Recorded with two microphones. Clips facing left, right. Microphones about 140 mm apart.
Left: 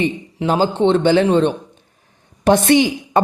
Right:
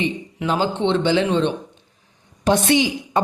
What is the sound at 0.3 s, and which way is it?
A woman's voice, 35° left (ahead or behind).